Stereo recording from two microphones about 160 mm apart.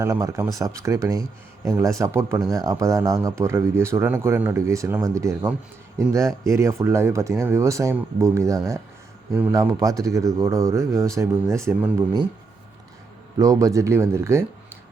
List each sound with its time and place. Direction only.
0.0 s speech: 20° right (ahead or behind)
13.4 s speech: 20° right (ahead or behind)